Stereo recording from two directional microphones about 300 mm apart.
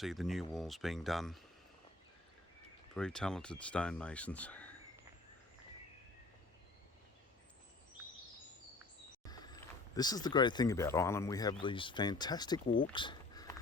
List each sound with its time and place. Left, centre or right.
0.0 s speech: centre
2.9 s speech: centre
9.2 s vehicle: centre
9.9 s speech: centre
12.9 s a sound: centre